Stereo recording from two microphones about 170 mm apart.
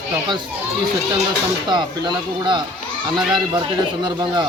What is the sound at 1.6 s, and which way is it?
A man's voice, 25° right (ahead or behind).